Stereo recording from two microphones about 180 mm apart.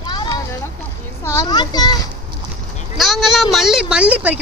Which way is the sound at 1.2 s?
20° left (ahead or behind).